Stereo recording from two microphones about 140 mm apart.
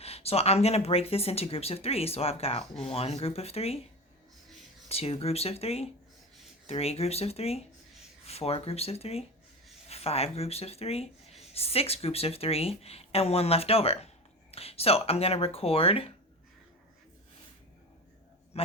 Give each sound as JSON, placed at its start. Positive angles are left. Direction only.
{"t": 0.0, "sound": "speech", "side_deg": 45}
{"t": 4.9, "sound": "speech", "side_deg": 45}
{"t": 18.5, "sound": "a sound", "side_deg": 45}